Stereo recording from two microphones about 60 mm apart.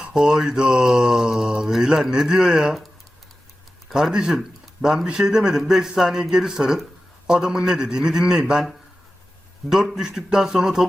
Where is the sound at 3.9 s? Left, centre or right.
Centre.